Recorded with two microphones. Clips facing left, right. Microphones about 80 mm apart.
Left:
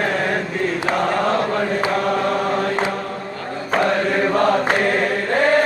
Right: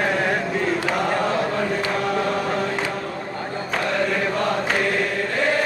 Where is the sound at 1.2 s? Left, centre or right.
Left.